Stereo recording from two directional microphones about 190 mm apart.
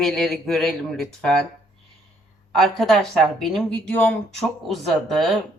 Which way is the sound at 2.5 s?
Centre (ahead or behind).